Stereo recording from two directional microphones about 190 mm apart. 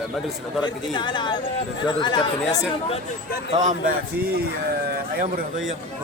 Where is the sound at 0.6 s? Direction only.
25° left (ahead or behind).